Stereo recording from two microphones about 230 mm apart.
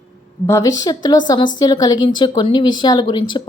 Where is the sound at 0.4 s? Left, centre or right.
Centre.